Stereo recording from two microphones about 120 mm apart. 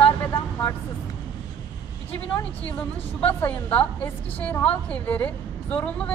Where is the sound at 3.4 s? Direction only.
15° left (ahead or behind).